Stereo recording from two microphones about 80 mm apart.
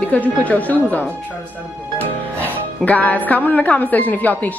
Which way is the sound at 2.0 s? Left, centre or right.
Left.